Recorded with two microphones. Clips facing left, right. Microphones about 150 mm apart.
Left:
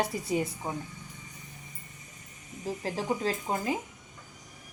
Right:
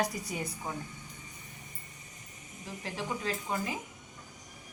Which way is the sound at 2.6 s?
40° left (ahead or behind).